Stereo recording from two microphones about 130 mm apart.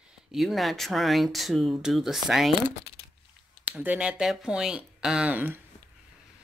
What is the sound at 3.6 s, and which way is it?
Speech, 10° right (ahead or behind).